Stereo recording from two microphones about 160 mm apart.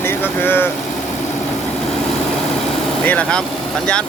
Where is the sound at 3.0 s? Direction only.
5° left (ahead or behind).